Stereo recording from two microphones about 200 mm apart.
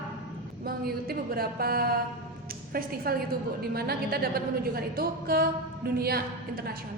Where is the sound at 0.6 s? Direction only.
50° right (ahead or behind).